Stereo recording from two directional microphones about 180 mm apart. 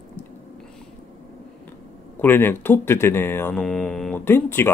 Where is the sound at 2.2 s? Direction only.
10° left (ahead or behind).